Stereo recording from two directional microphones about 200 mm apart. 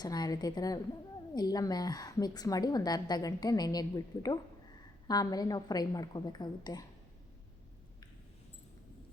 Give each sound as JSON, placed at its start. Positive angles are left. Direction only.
{"t": 0.0, "sound": "a woman's voice", "side_deg": 20}